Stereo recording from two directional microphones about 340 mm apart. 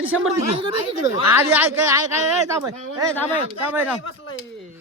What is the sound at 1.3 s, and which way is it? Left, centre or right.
Speech, centre.